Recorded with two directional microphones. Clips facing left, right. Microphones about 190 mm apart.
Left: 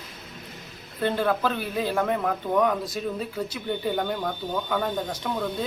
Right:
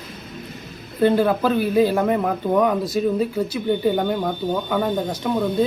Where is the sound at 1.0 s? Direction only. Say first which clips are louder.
Right 7 dB; 10° right (ahead or behind).